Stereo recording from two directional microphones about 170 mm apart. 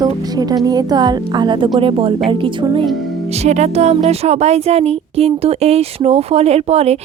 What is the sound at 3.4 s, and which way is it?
Speech, 40° right (ahead or behind).